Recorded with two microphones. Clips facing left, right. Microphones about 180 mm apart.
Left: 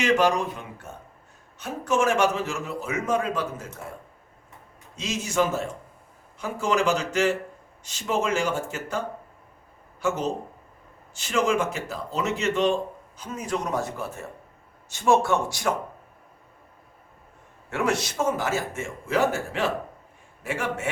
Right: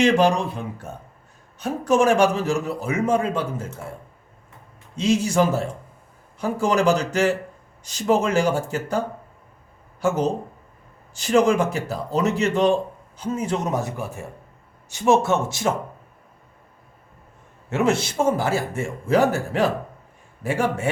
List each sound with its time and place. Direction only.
0.0 s a man's voice: 30° right (ahead or behind)
4.9 s a man's voice: 30° right (ahead or behind)
11.1 s a man's voice: 35° right (ahead or behind)
17.7 s a man's voice: 25° right (ahead or behind)